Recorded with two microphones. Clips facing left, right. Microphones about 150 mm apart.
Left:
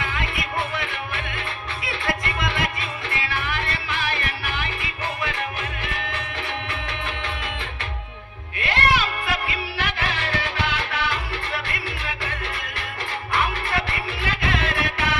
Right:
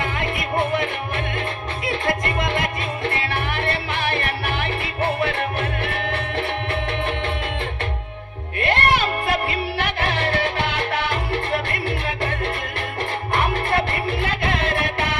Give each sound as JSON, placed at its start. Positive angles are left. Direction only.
{"t": 0.0, "sound": "music", "side_deg": -50}
{"t": 8.5, "sound": "music", "side_deg": -55}
{"t": 13.3, "sound": "music", "side_deg": -55}